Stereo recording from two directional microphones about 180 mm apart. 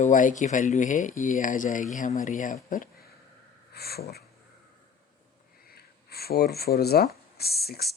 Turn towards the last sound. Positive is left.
turn(degrees=60)  # may be behind; listen again after turning